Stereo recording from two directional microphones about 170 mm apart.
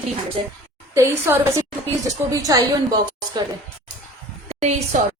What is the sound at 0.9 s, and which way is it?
A woman's voice, 15° right (ahead or behind).